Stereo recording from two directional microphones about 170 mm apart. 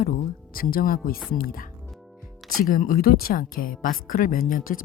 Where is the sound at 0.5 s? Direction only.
60° left (ahead or behind).